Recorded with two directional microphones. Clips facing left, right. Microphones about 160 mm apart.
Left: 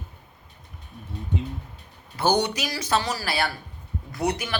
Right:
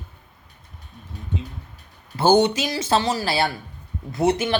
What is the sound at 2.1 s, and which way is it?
Speech, 25° right (ahead or behind).